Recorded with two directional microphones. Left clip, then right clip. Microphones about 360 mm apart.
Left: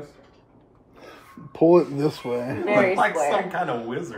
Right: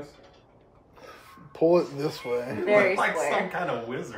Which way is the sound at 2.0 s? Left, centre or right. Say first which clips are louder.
Left 3 dB; left.